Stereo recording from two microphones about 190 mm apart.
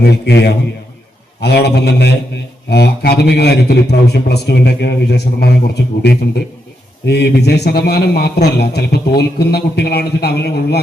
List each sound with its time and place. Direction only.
0.0 s a man's voice: 60° left (ahead or behind)